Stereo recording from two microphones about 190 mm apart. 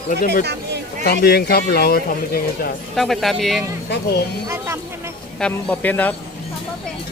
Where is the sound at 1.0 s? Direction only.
55° left (ahead or behind).